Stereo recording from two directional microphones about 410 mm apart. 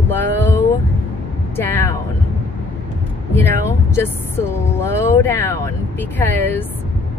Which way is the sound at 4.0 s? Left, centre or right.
Centre.